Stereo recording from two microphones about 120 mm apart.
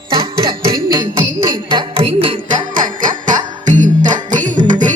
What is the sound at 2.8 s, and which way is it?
Music, 90° right.